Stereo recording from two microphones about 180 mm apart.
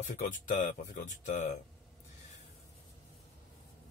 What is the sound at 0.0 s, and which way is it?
Speech, 40° left (ahead or behind).